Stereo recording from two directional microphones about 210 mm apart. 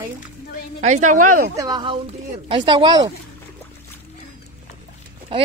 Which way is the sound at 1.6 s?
20° right (ahead or behind).